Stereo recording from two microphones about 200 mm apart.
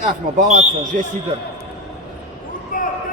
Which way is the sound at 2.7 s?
40° left (ahead or behind).